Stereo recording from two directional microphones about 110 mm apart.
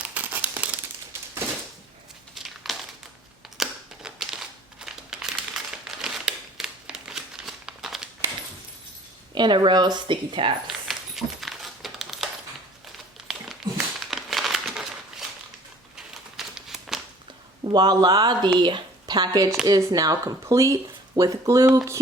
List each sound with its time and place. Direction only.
0.0 s crumpling: 15° right (ahead or behind)
2.3 s crumpling: centre (ahead or behind)
9.3 s speech: 45° right (ahead or behind)
10.7 s a sound: centre (ahead or behind)
13.2 s crumpling: centre (ahead or behind)
16.4 s crumpling: 5° right (ahead or behind)
17.6 s speech: 40° right (ahead or behind)